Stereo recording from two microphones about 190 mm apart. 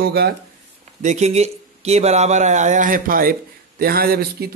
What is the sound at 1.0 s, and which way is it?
Speech, 35° right (ahead or behind).